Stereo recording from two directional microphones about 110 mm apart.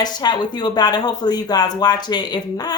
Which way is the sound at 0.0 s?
40° left (ahead or behind).